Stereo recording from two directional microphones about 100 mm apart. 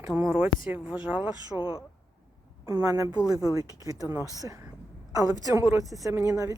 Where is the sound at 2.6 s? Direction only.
30° right (ahead or behind).